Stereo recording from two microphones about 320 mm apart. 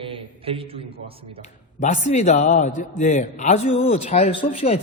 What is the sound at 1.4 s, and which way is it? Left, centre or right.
A man's voice, left.